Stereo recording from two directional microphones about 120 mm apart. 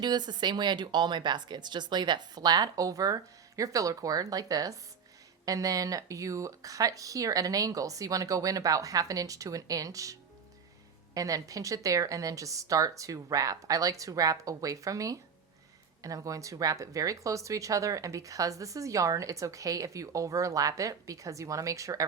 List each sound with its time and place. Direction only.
0.0 s speech: 35° right (ahead or behind)